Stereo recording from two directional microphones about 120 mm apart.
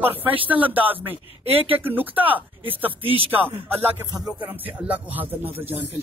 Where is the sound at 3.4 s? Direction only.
15° right (ahead or behind).